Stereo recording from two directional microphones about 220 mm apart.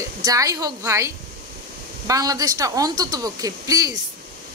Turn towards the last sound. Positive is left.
turn(degrees=-15)  # may be behind; listen again after turning